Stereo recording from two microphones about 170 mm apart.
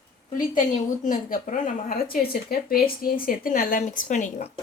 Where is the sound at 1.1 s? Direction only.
55° left (ahead or behind).